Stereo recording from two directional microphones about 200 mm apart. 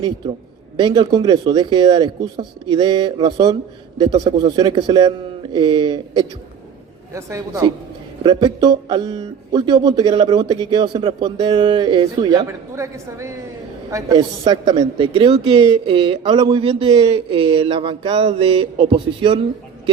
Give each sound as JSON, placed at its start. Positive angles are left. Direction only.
{"t": 0.8, "sound": "a man's voice", "side_deg": -20}